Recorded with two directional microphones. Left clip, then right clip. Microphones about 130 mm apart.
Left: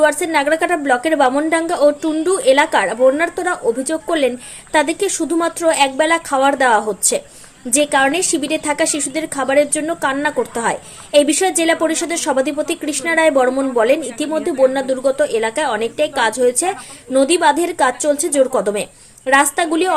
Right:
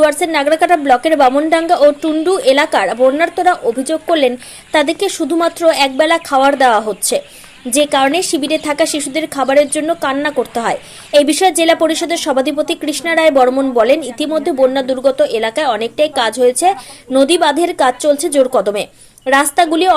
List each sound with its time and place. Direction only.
0.0 s a woman's voice: 25° right (ahead or behind)